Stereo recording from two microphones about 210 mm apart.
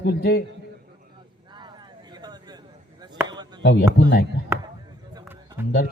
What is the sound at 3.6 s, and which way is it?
Speech, 55° left (ahead or behind).